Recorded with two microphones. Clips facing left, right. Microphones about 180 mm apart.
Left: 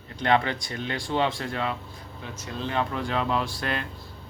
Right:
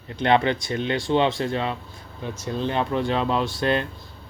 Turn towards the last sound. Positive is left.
turn(degrees=-25)  # may be behind; listen again after turning